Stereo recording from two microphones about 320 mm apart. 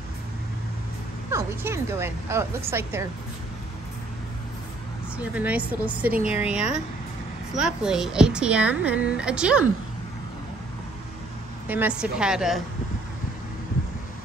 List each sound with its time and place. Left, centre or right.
1.3 s speech: centre
5.1 s speech: centre
11.6 s speech: centre